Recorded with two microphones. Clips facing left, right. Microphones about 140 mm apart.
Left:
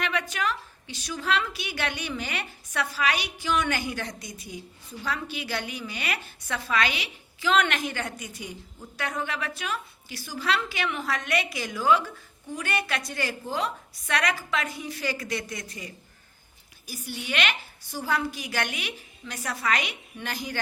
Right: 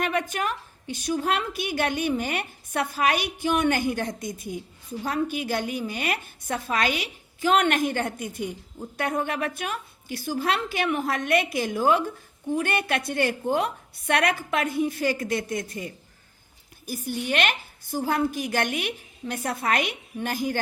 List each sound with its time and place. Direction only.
0.0 s a woman's voice: 50° right (ahead or behind)